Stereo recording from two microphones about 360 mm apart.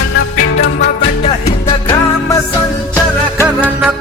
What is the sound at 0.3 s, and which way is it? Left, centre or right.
Music, left.